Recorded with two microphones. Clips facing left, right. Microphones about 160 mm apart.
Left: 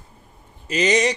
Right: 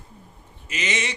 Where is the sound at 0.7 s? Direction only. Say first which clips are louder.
Left 10 dB; 35° left (ahead or behind).